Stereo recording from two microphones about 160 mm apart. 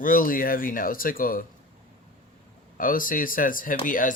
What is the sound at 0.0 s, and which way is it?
Speech, 60° left (ahead or behind).